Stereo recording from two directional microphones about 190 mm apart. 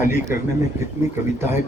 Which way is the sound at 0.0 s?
10° right (ahead or behind).